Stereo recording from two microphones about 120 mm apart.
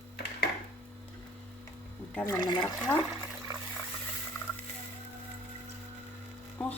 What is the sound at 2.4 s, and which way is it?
Speech, 35° left (ahead or behind).